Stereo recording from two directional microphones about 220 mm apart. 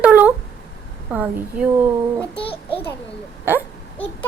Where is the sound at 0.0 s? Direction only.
5° right (ahead or behind).